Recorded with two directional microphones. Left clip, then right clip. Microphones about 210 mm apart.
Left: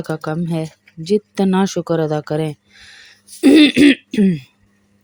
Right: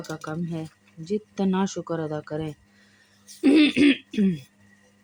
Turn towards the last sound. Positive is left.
turn(degrees=35)  # may be behind; listen again after turning